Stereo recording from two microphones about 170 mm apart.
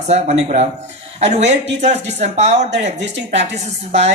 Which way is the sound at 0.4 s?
40° right (ahead or behind).